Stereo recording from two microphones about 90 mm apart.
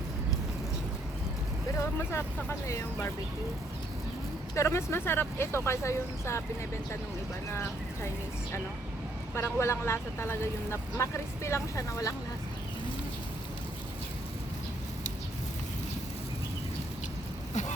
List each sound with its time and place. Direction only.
1.8 s speech: 30° left (ahead or behind)
4.5 s speech: 30° left (ahead or behind)
9.3 s speech: 30° left (ahead or behind)